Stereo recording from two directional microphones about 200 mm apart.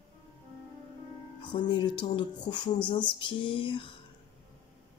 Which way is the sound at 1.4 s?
25° left (ahead or behind).